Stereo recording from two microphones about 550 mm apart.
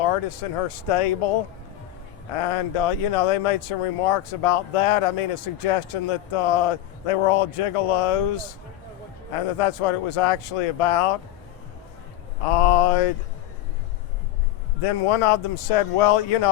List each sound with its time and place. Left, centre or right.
0.1 s speech: left
2.3 s speech: left
9.6 s speech: left
12.5 s speech: left
14.8 s speech: left